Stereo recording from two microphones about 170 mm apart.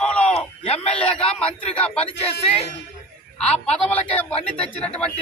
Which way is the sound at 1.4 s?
35° left (ahead or behind).